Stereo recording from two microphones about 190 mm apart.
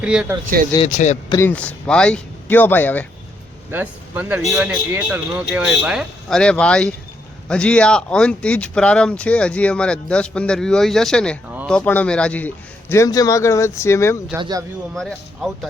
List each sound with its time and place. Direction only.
0.0 s speech: 5° right (ahead or behind)
0.8 s speech: 40° left (ahead or behind)
1.3 s a man's voice: 15° left (ahead or behind)
3.7 s a man's voice: 10° right (ahead or behind)
11.5 s a sound: centre (ahead or behind)
11.9 s a man's voice: 5° left (ahead or behind)
14.3 s speech: 20° right (ahead or behind)
14.9 s speech: centre (ahead or behind)